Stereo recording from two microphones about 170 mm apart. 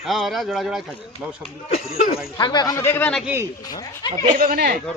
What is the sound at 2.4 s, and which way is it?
Speech, 25° left (ahead or behind).